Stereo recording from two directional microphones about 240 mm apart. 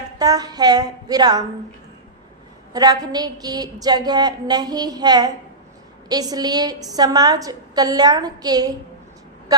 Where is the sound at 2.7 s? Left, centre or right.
Centre.